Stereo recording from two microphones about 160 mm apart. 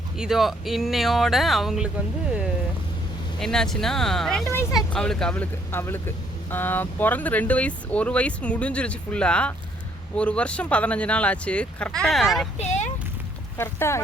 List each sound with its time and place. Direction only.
0.2 s speech: centre (ahead or behind)
3.4 s speech: 5° left (ahead or behind)
12.5 s a sound: 45° left (ahead or behind)
13.6 s speech: 15° left (ahead or behind)